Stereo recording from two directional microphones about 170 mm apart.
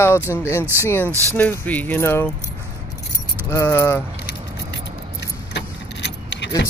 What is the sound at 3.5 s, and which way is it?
Speech, 15° left (ahead or behind).